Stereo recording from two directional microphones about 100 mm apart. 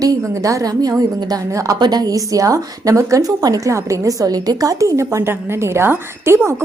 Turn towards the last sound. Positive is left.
turn(degrees=-25)  # may be behind; listen again after turning